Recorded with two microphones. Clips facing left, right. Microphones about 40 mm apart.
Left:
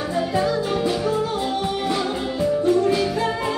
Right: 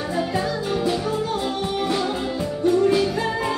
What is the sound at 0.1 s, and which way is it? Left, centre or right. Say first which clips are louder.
Music: left 3 dB; centre.